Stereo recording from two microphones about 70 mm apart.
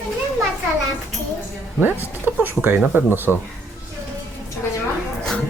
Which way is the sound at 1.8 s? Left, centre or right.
Right.